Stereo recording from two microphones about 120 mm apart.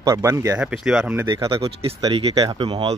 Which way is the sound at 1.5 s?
55° right (ahead or behind).